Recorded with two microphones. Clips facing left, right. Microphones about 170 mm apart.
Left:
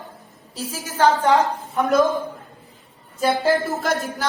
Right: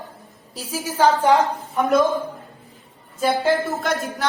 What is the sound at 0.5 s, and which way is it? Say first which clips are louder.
Speech: right 2 dB; 10° right (ahead or behind).